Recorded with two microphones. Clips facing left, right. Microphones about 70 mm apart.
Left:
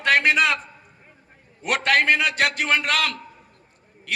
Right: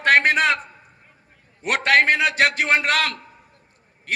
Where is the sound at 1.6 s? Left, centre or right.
Right.